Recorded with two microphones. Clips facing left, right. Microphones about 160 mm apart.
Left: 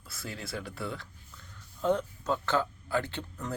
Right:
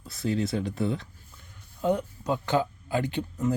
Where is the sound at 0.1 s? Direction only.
25° right (ahead or behind).